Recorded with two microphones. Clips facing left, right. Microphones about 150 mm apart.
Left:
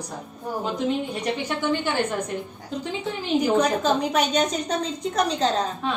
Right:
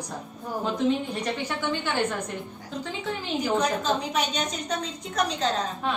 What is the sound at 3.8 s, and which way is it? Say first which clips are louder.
A woman's voice: left 5 dB; 45° left (ahead or behind).